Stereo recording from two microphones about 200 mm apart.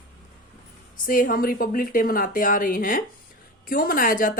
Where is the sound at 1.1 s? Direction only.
45° left (ahead or behind).